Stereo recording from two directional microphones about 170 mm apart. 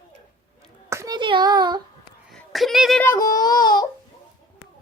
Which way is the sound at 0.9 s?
20° right (ahead or behind).